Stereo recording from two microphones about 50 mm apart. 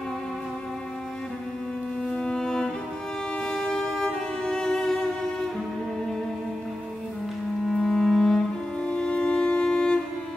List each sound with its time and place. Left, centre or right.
2.0 s music: centre
7.7 s cello: centre